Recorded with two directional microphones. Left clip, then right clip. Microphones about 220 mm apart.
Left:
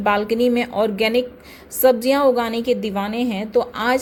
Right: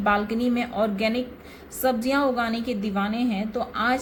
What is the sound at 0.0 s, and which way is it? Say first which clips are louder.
A woman's voice: left 6 dB; 40° left (ahead or behind).